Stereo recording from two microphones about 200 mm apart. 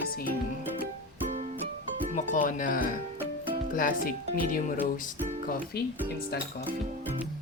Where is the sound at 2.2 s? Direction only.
40° left (ahead or behind).